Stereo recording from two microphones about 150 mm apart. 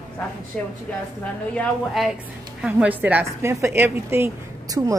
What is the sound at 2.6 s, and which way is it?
A woman's voice, 10° right (ahead or behind).